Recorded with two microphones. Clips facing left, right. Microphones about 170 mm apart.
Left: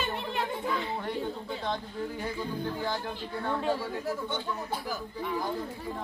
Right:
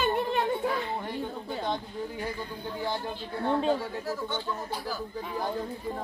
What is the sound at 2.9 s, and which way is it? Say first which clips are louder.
Speech: right 1 dB; 25° right (ahead or behind).